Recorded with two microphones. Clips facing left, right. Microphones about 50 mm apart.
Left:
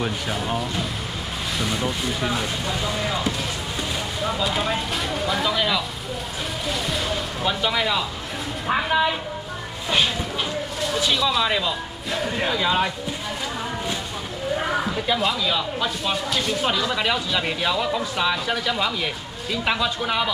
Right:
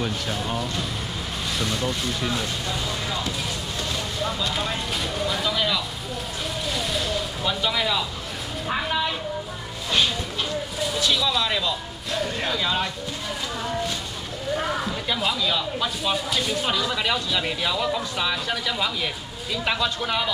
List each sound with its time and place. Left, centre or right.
0.0 s speech: centre
5.2 s vehicle: centre
6.7 s a sound: centre
7.4 s speech: centre
11.0 s speech: centre
15.0 s speech: centre